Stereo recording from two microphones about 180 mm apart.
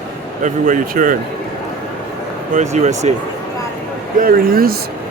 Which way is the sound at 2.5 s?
40° right (ahead or behind).